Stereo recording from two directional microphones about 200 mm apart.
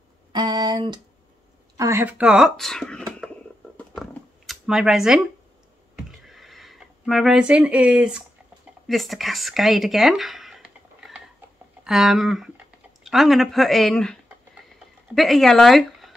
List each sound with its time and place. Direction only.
0.3 s speech: 20° right (ahead or behind)
1.8 s speech: 10° right (ahead or behind)
3.7 s a sound: 5° left (ahead or behind)
6.2 s a sound: centre (ahead or behind)
8.8 s speech: centre (ahead or behind)
15.1 s speech: centre (ahead or behind)